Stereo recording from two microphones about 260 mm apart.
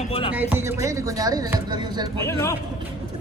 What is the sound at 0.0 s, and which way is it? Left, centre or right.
Music, left.